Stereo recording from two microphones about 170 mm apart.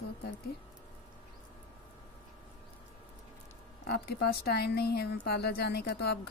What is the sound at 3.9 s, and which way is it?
Speech, 70° left (ahead or behind).